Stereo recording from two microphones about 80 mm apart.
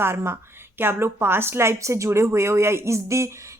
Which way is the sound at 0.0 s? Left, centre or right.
Right.